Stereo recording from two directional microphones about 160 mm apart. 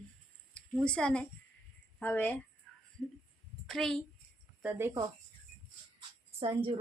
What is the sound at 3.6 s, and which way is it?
Speech, 5° left (ahead or behind).